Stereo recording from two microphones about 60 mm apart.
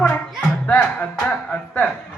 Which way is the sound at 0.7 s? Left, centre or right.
Left.